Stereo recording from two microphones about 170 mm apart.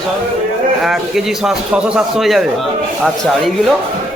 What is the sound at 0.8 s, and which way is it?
Speech, centre (ahead or behind).